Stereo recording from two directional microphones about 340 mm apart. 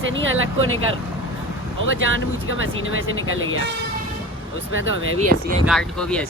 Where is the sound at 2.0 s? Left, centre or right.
Right.